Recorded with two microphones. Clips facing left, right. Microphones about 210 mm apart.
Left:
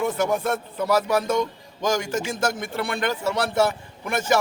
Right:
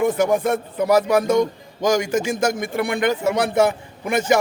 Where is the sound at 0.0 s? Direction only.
15° right (ahead or behind).